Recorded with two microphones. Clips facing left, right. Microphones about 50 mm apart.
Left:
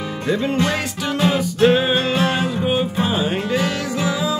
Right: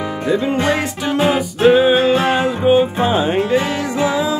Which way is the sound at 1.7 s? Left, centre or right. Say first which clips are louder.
Right 10 dB; centre.